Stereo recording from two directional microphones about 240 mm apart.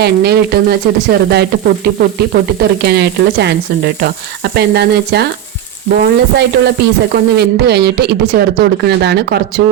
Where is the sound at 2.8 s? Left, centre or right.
Right.